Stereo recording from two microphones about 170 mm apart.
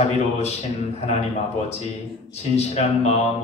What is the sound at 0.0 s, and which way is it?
Speech, 40° left (ahead or behind).